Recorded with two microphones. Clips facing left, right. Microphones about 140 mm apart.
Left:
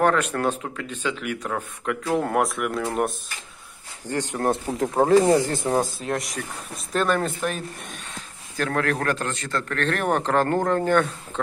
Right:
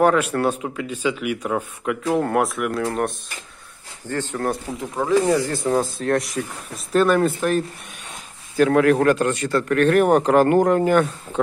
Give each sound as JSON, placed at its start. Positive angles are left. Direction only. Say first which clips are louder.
{"t": 0.0, "sound": "speech", "louder": "right 3 dB", "side_deg": -10}
{"t": 2.0, "sound": "speech", "louder": "right 2 dB", "side_deg": 0}
{"t": 4.0, "sound": "speech", "louder": "even", "side_deg": 15}
{"t": 4.7, "sound": "speech", "louder": "left 5 dB", "side_deg": 50}
{"t": 5.2, "sound": "speech", "louder": "even", "side_deg": 20}
{"t": 6.0, "sound": "speech", "louder": "right 6 dB", "side_deg": 0}